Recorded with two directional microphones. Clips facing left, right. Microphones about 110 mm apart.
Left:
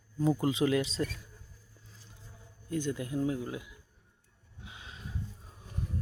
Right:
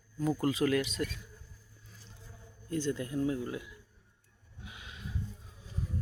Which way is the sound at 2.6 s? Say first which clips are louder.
Even; 15° left (ahead or behind).